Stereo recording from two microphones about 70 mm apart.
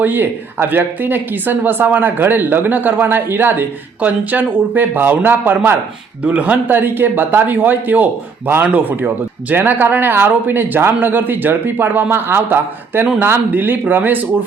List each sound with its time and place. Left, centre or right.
0.0 s speech: right